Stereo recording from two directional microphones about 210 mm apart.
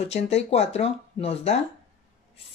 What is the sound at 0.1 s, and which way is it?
Speech, 30° left (ahead or behind).